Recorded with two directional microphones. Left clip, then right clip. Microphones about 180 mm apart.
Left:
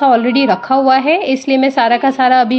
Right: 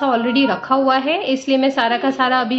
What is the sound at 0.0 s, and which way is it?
A woman's voice, 30° left (ahead or behind).